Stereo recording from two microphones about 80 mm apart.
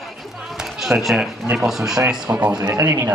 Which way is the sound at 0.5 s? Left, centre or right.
Centre.